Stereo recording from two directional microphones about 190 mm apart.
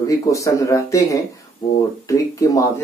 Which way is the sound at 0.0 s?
15° left (ahead or behind).